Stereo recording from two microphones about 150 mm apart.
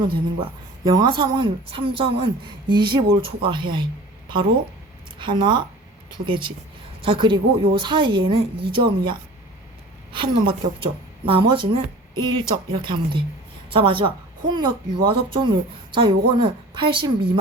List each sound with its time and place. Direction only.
0.0 s speech: 35° right (ahead or behind)
5.2 s a woman's voice: 30° right (ahead or behind)